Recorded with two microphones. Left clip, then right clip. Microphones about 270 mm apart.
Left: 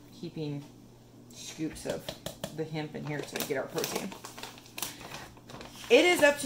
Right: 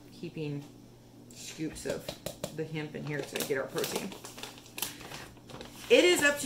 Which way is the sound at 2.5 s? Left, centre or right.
Left.